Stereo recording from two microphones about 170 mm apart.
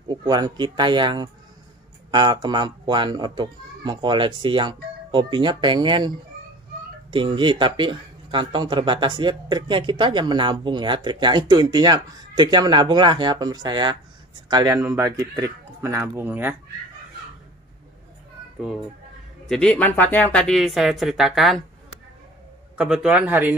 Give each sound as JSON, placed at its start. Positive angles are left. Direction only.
{"t": 0.1, "sound": "speech", "side_deg": -25}
{"t": 19.5, "sound": "speech", "side_deg": 5}
{"t": 22.8, "sound": "a man's voice", "side_deg": -5}